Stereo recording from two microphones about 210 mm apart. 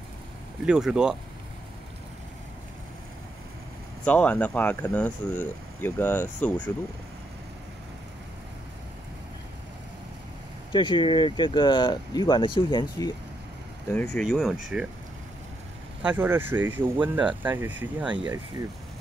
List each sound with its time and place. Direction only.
0.7 s speech: 5° right (ahead or behind)
4.0 s speech: 5° left (ahead or behind)
10.7 s speech: 20° left (ahead or behind)
13.9 s speech: centre (ahead or behind)
16.0 s speech: 10° right (ahead or behind)